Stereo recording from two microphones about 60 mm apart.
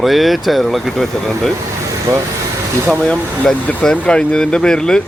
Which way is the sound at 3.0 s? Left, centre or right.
Centre.